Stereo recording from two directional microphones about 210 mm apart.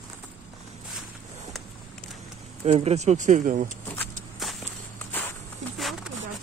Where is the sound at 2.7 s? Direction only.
30° right (ahead or behind).